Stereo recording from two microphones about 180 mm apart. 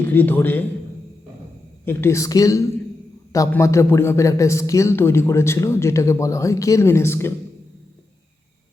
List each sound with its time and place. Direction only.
0.1 s speech: 10° left (ahead or behind)
1.8 s speech: 15° left (ahead or behind)